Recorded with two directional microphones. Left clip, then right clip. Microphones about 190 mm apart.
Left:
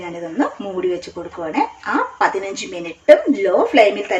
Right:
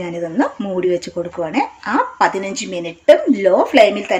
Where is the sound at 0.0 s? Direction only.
50° right (ahead or behind).